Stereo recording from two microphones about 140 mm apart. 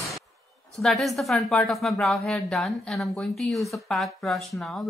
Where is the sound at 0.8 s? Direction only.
Centre (ahead or behind).